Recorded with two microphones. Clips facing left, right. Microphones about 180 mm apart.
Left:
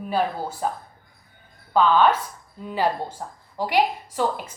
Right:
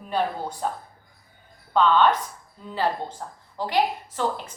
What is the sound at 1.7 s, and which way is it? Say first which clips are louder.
A woman's voice: left 1 dB; 5° left (ahead or behind).